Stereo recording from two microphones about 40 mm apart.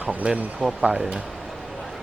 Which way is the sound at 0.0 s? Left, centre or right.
Right.